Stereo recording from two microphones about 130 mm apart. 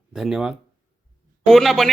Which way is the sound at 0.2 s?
5° right (ahead or behind).